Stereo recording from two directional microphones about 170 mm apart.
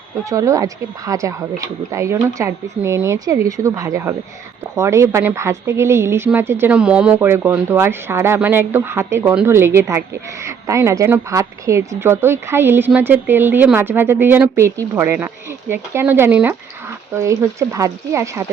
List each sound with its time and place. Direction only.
0.3 s a woman's voice: 20° right (ahead or behind)